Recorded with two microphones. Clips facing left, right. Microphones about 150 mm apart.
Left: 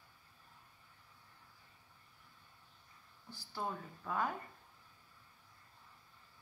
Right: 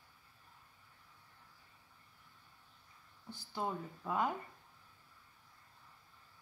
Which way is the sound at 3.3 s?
20° right (ahead or behind).